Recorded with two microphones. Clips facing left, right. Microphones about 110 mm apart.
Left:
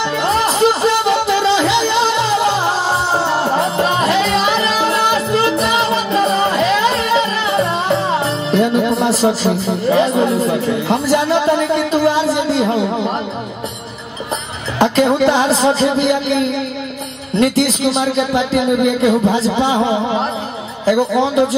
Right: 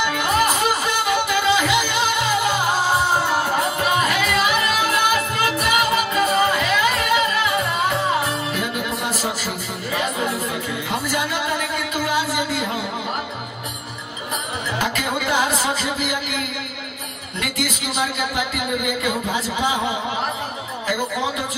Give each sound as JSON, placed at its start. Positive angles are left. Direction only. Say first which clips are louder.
{"t": 0.0, "sound": "music", "louder": "left 4 dB", "side_deg": 30}
{"t": 14.8, "sound": "speech", "louder": "left 13 dB", "side_deg": 30}
{"t": 20.8, "sound": "speech", "louder": "left 10 dB", "side_deg": 35}